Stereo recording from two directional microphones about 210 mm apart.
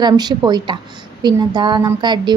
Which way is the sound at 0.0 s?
20° right (ahead or behind).